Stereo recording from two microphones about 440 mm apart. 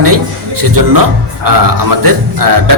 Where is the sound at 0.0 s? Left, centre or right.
Right.